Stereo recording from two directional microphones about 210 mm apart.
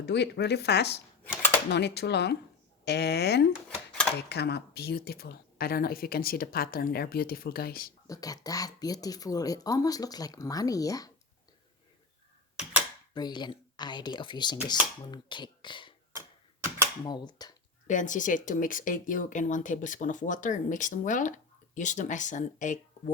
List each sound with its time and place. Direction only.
0.0 s speech: 55° left (ahead or behind)
3.5 s a sound: 5° left (ahead or behind)
4.3 s speech: 50° left (ahead or behind)
8.0 s speech: 15° left (ahead or behind)
13.1 s speech: 20° left (ahead or behind)
17.0 s speech: 20° left (ahead or behind)
17.8 s speech: 35° left (ahead or behind)